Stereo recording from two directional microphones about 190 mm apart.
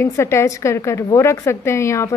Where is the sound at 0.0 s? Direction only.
15° left (ahead or behind).